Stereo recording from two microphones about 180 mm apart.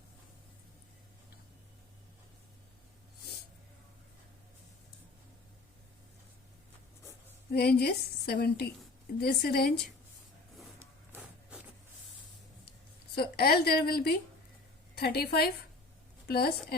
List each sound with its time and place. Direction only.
7.5 s a woman's voice: 60° left (ahead or behind)
10.8 s printer: 10° right (ahead or behind)
13.1 s a woman's voice: 60° left (ahead or behind)